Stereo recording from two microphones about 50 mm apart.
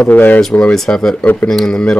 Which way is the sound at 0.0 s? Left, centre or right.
Left.